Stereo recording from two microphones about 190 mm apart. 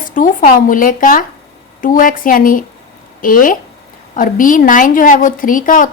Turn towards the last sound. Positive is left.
turn(degrees=45)  # may be behind; listen again after turning